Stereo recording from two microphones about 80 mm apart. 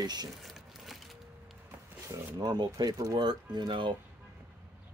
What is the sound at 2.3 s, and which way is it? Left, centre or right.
Speech, right.